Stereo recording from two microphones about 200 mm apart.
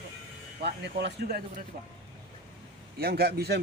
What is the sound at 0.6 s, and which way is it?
Speech, 55° right (ahead or behind).